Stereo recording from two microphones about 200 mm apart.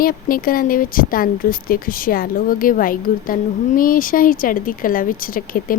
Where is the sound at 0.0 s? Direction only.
45° left (ahead or behind).